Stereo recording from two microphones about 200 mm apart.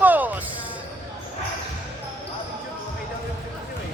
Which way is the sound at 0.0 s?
10° right (ahead or behind).